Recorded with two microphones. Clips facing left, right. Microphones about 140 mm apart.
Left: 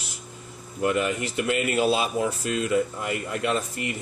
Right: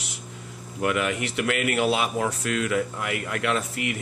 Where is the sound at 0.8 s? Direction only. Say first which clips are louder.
Left 1 dB; 70° right (ahead or behind).